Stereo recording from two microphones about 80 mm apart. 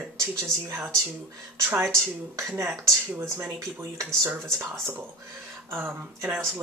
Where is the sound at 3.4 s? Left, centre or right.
Right.